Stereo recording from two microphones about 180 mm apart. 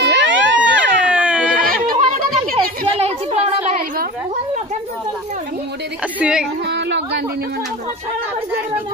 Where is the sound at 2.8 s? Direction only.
35° right (ahead or behind).